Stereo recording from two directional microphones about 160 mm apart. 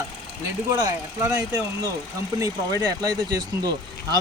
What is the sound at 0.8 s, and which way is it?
Speech, 20° right (ahead or behind).